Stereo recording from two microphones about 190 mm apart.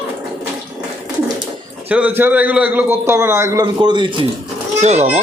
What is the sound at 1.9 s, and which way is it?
A man's voice, 5° right (ahead or behind).